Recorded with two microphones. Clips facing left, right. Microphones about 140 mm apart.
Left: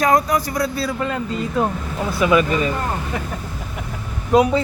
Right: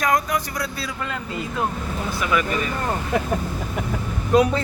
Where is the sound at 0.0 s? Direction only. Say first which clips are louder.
Left 5 dB; 35° left (ahead or behind).